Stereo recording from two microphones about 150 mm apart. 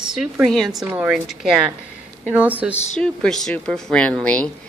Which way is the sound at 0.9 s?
10° right (ahead or behind).